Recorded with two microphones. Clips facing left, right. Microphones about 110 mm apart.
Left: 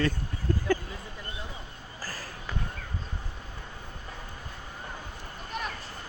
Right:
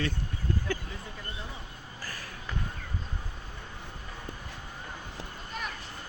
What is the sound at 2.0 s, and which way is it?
Basketball bounce, 35° left (ahead or behind).